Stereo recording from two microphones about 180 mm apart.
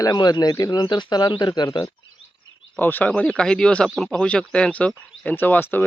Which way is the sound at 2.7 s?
10° left (ahead or behind).